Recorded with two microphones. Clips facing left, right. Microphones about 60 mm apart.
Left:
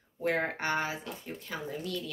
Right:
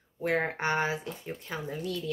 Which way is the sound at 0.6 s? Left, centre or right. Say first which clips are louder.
Right 3 dB; right.